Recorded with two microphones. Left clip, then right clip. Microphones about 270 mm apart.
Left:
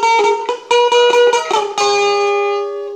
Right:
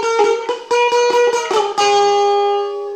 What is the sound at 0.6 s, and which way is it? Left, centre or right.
Music, left.